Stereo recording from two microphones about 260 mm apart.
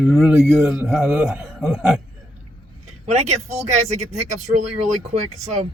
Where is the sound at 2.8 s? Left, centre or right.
Right.